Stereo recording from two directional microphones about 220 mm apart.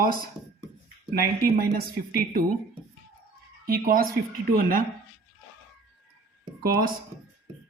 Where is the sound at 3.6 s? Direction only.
40° right (ahead or behind).